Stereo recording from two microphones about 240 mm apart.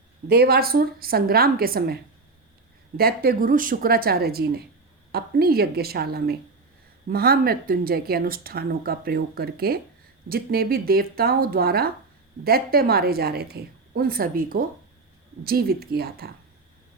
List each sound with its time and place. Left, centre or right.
0.3 s speech: right
3.0 s speech: right